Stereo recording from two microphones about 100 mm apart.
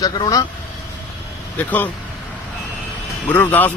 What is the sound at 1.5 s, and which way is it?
Speech, 15° left (ahead or behind).